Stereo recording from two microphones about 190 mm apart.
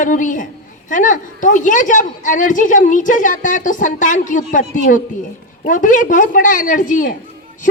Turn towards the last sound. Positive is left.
turn(degrees=45)  # may be behind; listen again after turning